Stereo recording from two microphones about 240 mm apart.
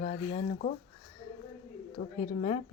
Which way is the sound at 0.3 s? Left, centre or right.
Left.